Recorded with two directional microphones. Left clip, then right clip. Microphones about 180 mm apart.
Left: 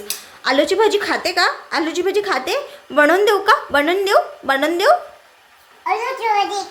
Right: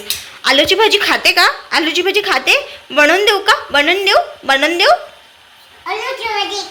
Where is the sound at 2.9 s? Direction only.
25° left (ahead or behind).